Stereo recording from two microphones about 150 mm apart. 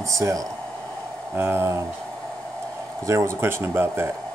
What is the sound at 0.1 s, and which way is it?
Speech, 20° right (ahead or behind).